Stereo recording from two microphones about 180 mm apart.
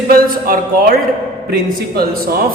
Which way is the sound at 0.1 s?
55° right (ahead or behind).